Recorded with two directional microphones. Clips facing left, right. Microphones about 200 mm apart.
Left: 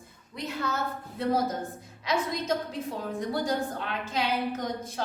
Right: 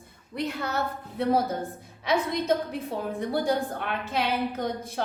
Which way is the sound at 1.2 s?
60° right (ahead or behind).